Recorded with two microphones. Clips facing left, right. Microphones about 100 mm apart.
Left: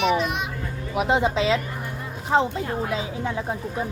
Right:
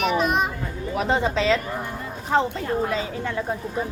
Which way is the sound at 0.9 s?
15° left (ahead or behind).